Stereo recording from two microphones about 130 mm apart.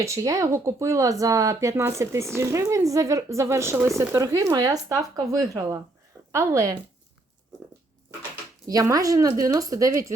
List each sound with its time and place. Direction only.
0.0 s speech: 25° right (ahead or behind)
8.6 s speech: 25° right (ahead or behind)